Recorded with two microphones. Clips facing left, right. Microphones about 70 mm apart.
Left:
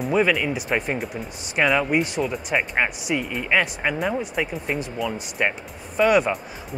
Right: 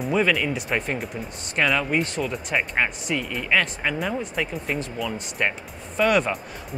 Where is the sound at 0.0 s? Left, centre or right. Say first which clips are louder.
Left 2 dB; centre.